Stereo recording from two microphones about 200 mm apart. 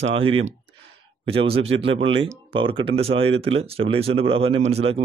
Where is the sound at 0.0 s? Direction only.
25° right (ahead or behind).